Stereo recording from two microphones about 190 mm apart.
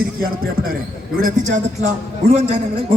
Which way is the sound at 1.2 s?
40° right (ahead or behind).